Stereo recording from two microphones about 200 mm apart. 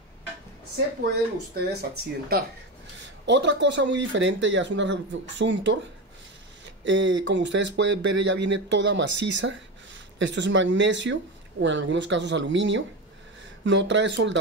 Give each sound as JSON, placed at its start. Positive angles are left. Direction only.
{"t": 1.0, "sound": "speech", "side_deg": -50}
{"t": 6.8, "sound": "speech", "side_deg": -65}